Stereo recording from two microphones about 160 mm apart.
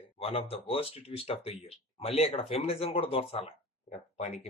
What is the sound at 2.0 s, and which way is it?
Speech, 40° left (ahead or behind).